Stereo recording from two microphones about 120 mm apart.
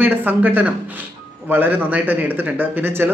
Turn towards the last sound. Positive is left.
turn(degrees=-15)  # may be behind; listen again after turning